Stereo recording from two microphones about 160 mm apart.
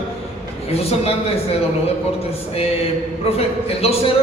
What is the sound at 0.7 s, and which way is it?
Speech, 40° left (ahead or behind).